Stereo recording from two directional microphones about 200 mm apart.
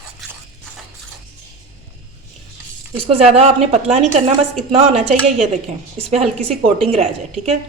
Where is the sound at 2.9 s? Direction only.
30° right (ahead or behind).